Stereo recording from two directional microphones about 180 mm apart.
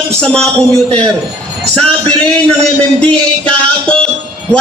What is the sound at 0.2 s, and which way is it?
Music, 5° left (ahead or behind).